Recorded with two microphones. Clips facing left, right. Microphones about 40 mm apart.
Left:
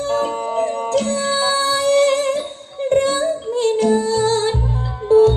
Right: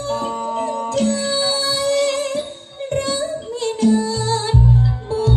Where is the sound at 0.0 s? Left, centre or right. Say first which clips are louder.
Left 3 dB; left.